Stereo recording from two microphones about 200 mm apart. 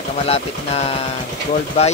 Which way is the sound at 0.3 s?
30° left (ahead or behind).